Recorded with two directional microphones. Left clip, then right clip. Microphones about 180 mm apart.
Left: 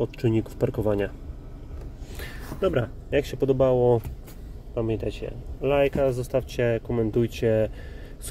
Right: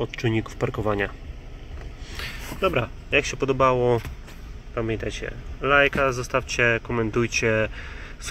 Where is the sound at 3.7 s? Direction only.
20° right (ahead or behind).